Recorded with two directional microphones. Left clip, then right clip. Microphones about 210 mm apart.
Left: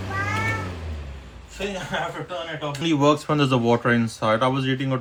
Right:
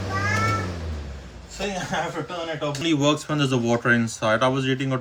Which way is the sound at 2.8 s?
20° left (ahead or behind).